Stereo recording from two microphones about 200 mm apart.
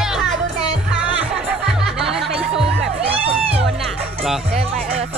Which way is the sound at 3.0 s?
30° right (ahead or behind).